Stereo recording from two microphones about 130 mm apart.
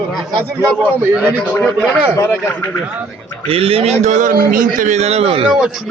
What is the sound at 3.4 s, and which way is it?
A man's voice, 45° right (ahead or behind).